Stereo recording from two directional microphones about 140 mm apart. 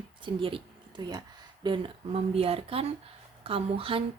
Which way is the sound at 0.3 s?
40° right (ahead or behind).